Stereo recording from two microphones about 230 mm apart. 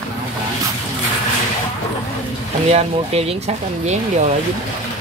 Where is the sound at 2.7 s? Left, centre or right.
Right.